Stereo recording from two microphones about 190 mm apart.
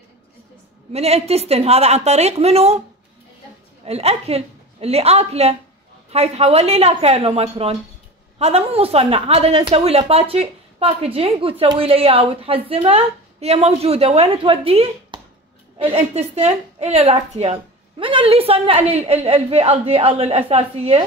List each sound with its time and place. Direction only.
0.9 s a woman's voice: 35° right (ahead or behind)
3.8 s a woman's voice: 35° right (ahead or behind)